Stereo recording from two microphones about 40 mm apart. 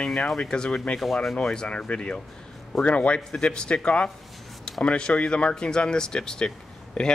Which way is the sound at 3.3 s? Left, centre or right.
Left.